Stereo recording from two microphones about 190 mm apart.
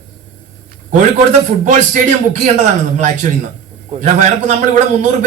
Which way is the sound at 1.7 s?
40° right (ahead or behind).